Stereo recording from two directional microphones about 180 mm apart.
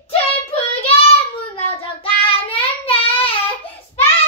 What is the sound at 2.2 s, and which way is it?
Child singing, 30° left (ahead or behind).